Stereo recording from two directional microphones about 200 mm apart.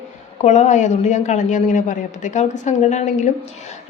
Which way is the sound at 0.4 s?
35° left (ahead or behind).